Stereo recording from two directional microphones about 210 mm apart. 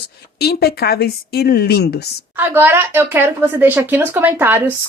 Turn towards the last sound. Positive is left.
turn(degrees=-10)  # may be behind; listen again after turning